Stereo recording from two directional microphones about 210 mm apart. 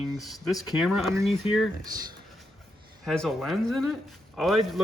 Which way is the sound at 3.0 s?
Centre (ahead or behind).